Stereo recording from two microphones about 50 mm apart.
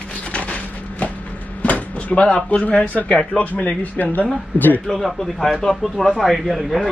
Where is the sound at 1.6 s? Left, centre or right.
Left.